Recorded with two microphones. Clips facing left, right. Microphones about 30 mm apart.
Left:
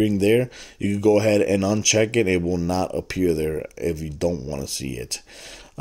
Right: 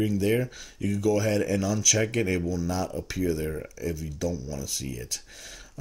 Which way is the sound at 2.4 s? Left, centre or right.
Left.